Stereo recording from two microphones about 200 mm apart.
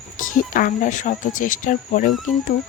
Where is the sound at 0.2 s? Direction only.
45° left (ahead or behind).